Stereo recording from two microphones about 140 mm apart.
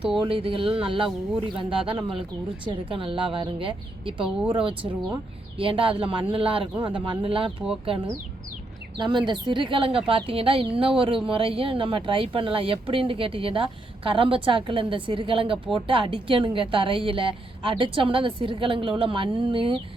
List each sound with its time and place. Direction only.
0.2 s speech: 40° right (ahead or behind)
9.0 s speech: 30° right (ahead or behind)